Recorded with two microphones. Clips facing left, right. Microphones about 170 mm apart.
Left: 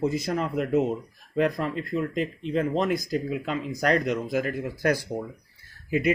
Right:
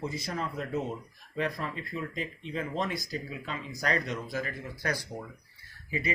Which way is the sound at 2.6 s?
50° left (ahead or behind).